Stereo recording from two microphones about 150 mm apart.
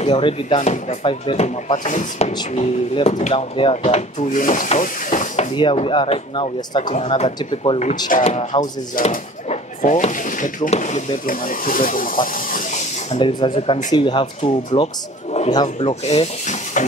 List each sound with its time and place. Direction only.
0.0 s speech: 40° left (ahead or behind)
0.6 s speech: 50° left (ahead or behind)
1.9 s speech: 55° left (ahead or behind)
5.6 s speech: 35° left (ahead or behind)
7.0 s speech: 45° left (ahead or behind)
9.0 s speech: 70° left (ahead or behind)
9.5 s a sound: 55° left (ahead or behind)
10.7 s speech: 50° left (ahead or behind)
13.2 s speech: 35° left (ahead or behind)
15.9 s speech: 45° left (ahead or behind)